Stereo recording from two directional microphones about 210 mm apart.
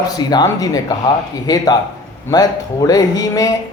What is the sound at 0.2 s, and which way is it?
Speech, 20° left (ahead or behind).